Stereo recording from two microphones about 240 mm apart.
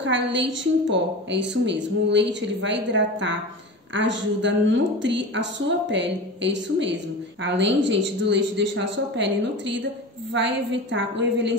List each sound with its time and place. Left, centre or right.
0.0 s a woman's voice: right